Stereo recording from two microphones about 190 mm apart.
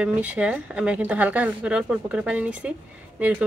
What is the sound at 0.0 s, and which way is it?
Speech, 5° right (ahead or behind).